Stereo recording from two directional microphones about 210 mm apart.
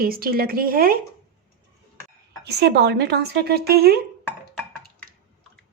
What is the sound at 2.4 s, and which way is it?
Speech, 50° right (ahead or behind).